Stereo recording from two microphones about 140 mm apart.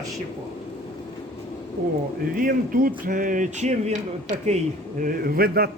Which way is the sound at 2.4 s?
80° right.